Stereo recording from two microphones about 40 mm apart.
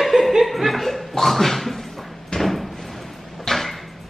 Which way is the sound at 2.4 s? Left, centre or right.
Centre.